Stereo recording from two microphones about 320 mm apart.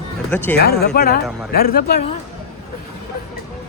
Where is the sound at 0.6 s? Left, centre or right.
Left.